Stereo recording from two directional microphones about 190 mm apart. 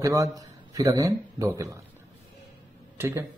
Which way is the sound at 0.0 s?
15° right (ahead or behind).